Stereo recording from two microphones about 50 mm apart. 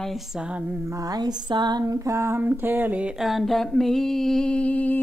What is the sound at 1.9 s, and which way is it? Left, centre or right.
Speech, right.